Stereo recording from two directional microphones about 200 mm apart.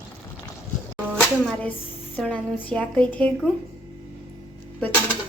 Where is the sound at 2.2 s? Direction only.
5° left (ahead or behind).